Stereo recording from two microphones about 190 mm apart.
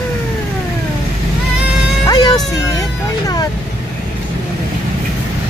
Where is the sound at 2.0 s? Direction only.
20° left (ahead or behind).